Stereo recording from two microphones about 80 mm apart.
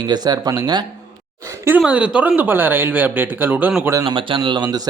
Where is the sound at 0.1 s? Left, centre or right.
Right.